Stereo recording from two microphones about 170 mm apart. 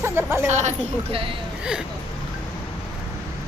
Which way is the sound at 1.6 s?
5° right (ahead or behind).